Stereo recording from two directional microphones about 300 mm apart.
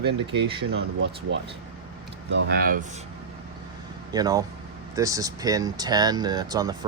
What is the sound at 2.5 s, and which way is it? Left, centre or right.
Speech, right.